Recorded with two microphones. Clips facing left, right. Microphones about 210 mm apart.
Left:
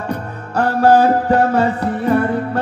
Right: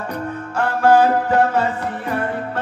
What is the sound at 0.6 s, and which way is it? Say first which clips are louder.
Music: left 2 dB; 40° left (ahead or behind).